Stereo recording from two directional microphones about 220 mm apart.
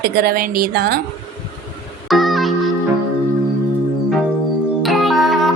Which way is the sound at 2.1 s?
Centre (ahead or behind).